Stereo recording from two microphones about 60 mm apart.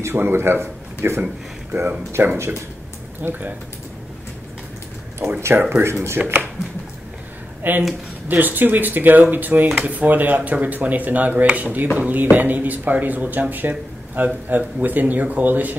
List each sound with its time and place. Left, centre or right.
0.0 s a man's voice: right
5.7 s speech: right
7.6 s speech: right